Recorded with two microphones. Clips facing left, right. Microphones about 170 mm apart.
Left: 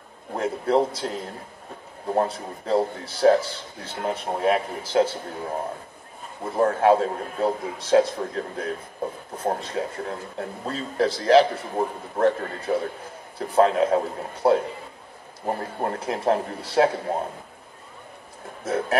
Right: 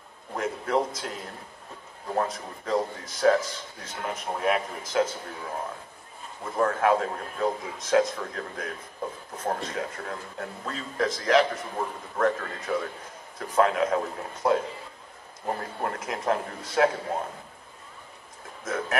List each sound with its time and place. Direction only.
0.3 s a man's voice: 30° left (ahead or behind)
2.1 s a man's voice: 30° left (ahead or behind)
6.5 s a man's voice: 30° left (ahead or behind)
18.6 s speech: 30° left (ahead or behind)